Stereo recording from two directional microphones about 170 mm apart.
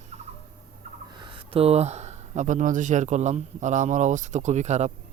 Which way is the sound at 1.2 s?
35° right (ahead or behind).